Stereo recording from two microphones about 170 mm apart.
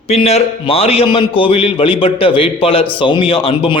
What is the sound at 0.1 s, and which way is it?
A man's voice, 40° left (ahead or behind).